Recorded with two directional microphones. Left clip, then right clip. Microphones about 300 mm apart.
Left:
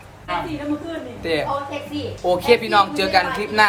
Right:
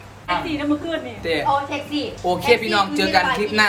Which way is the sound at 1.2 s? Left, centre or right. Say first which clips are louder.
Right 2 dB; centre.